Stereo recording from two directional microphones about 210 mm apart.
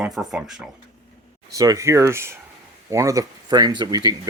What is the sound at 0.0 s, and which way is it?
Speech, 5° right (ahead or behind).